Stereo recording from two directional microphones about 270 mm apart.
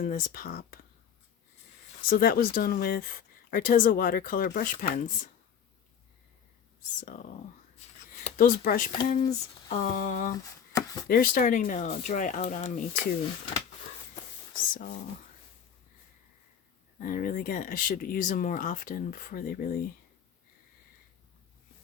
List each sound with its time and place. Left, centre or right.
0.0 s speech: left
2.0 s speech: left
7.0 s speech: left
7.8 s a sound: left
9.0 s speech: left
10.3 s a sound: centre
11.1 s speech: left
14.7 s speech: left
17.0 s speech: left